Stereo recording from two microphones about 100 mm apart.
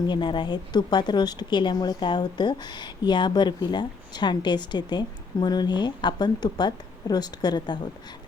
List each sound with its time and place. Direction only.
0.1 s a woman's voice: 50° left (ahead or behind)